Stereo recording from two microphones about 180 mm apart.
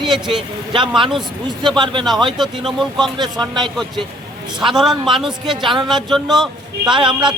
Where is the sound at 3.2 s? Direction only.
25° right (ahead or behind).